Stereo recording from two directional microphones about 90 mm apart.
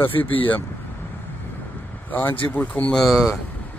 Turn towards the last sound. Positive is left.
turn(degrees=-5)  # may be behind; listen again after turning